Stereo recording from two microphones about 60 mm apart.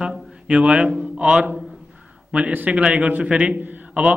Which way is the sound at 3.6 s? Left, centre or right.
Right.